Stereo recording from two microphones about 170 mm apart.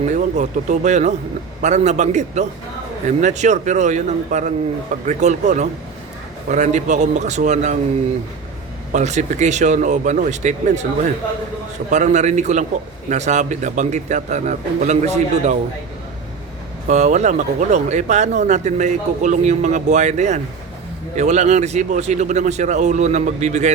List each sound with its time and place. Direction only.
0.0 s speech: 45° right (ahead or behind)
8.9 s speech: 45° right (ahead or behind)
11.9 s speech: 45° right (ahead or behind)
16.9 s speech: 45° right (ahead or behind)